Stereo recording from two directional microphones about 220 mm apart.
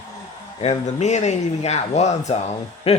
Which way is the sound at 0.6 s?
30° left (ahead or behind).